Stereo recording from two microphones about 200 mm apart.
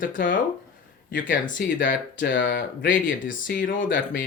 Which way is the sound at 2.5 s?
55° left (ahead or behind).